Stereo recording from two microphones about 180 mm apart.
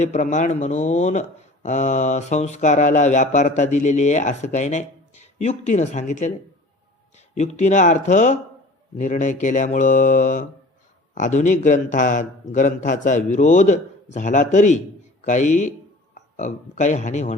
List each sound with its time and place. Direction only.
0.0 s speech: 40° left (ahead or behind)
7.3 s a man's voice: 40° left (ahead or behind)